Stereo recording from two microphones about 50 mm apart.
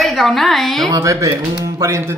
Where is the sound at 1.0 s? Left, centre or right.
Right.